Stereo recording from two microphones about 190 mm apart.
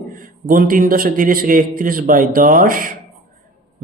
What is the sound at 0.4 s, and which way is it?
A man's voice, 50° right (ahead or behind).